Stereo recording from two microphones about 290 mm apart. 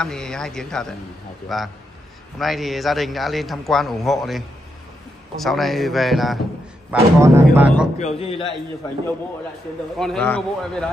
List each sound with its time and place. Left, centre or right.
0.0 s speech: centre
5.4 s speech: centre
8.0 s a man's voice: centre
9.9 s speech: centre